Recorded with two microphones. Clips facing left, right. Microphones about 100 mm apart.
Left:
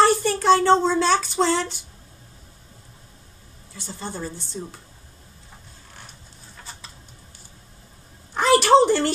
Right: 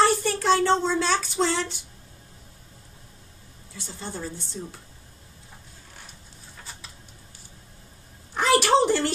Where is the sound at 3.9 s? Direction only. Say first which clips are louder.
Left 3 dB; 35° left (ahead or behind).